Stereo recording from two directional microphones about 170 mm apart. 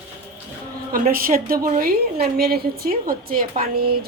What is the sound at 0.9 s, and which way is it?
A woman's voice, 55° right (ahead or behind).